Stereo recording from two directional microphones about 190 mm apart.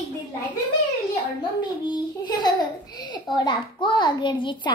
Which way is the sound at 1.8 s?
25° left (ahead or behind).